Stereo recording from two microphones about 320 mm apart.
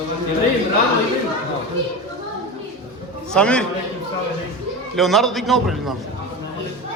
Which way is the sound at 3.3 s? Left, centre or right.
Centre.